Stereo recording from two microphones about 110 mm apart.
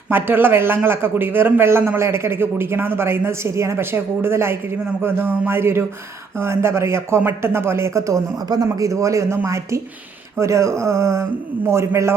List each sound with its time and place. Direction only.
0.1 s a man's voice: 20° right (ahead or behind)